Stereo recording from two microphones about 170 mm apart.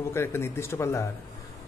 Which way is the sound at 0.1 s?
15° left (ahead or behind).